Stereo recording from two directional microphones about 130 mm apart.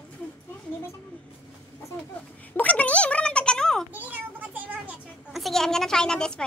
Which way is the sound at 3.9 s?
15° right (ahead or behind).